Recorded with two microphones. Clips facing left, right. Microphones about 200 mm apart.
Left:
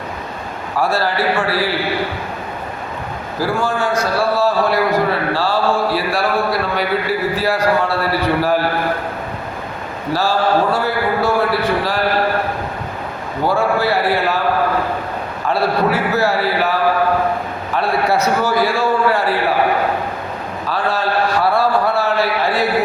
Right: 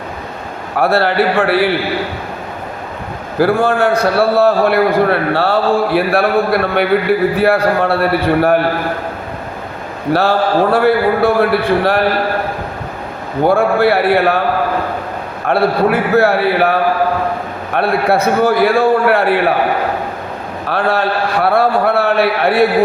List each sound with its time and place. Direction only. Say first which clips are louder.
0.8 s a man's voice: right 5 dB; 60° right (ahead or behind)
3.3 s a man's voice: right 7 dB; 60° right (ahead or behind)
10.1 s a man's voice: right 3 dB; 60° right (ahead or behind)
13.4 s a man's voice: right 5 dB; 55° right (ahead or behind)
15.4 s a man's voice: right 4 dB; 60° right (ahead or behind)
17.7 s a man's voice: right 3 dB; 55° right (ahead or behind)
20.7 s a man's voice: right 4 dB; 60° right (ahead or behind)